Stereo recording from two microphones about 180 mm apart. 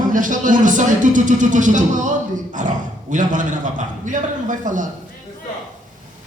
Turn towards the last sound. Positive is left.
turn(degrees=-45)  # may be behind; listen again after turning